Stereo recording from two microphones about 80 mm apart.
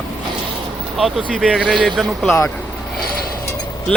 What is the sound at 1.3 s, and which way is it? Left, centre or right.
A man's voice, centre.